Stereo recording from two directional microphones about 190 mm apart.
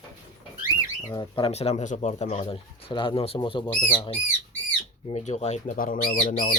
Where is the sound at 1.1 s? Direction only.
25° left (ahead or behind); by 6.5 s 45° left (ahead or behind).